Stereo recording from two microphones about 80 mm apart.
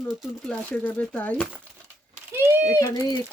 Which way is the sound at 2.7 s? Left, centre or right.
Left.